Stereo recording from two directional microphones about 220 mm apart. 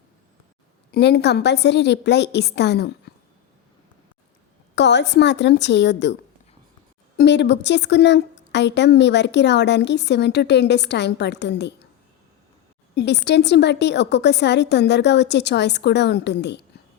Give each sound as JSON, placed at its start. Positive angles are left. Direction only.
{"t": 0.9, "sound": "a woman's voice", "side_deg": 45}
{"t": 4.7, "sound": "a woman's voice", "side_deg": 50}
{"t": 7.2, "sound": "a woman's voice", "side_deg": 50}
{"t": 12.9, "sound": "a woman's voice", "side_deg": 50}